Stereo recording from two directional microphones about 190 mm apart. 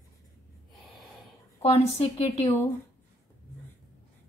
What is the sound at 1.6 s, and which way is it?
Speech, 35° left (ahead or behind).